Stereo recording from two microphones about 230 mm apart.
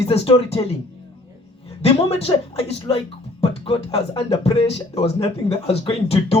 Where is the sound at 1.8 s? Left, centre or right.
Left.